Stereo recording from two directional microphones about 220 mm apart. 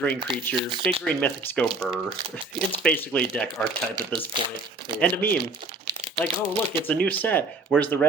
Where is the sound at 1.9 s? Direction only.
25° right (ahead or behind).